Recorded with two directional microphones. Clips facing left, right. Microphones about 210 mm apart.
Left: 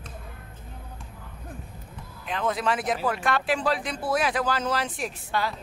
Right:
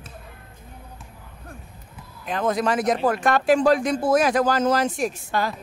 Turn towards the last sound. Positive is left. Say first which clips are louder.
# right 5 dB
turn(degrees=-45)  # may be behind; listen again after turning